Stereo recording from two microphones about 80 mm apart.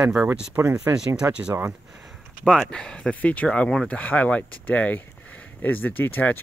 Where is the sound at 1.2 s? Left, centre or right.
Centre.